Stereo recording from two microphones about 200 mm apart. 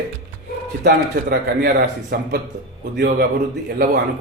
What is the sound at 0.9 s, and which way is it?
A man's voice, 50° right (ahead or behind).